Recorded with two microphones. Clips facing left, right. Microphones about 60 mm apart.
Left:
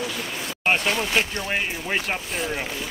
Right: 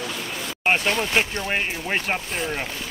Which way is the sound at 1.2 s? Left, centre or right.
Centre.